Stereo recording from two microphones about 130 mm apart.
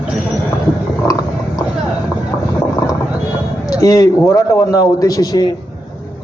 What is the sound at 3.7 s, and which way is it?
A man's voice, 25° left (ahead or behind).